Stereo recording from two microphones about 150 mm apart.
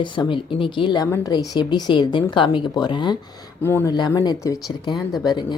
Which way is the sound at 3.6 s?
15° left (ahead or behind).